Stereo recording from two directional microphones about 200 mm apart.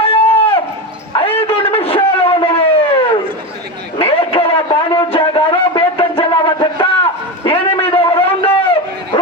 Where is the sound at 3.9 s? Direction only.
30° left (ahead or behind).